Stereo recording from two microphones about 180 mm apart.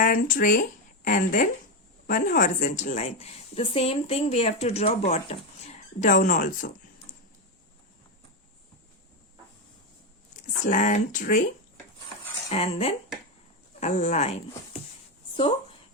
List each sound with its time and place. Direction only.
0.0 s a woman's voice: 50° left (ahead or behind)
10.7 s speech: 45° left (ahead or behind)
12.5 s a woman's voice: 35° left (ahead or behind)